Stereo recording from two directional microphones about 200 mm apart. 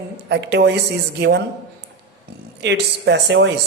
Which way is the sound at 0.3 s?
55° right (ahead or behind).